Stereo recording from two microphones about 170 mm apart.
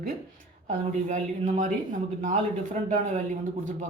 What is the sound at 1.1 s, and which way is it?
Speech, 45° right (ahead or behind).